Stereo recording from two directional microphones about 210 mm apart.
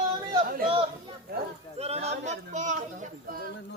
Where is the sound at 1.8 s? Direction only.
30° right (ahead or behind).